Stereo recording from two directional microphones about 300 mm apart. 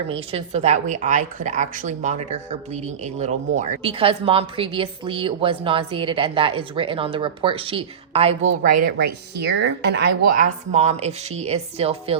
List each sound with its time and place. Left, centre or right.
0.1 s a woman's voice: centre
8.8 s a woman's voice: right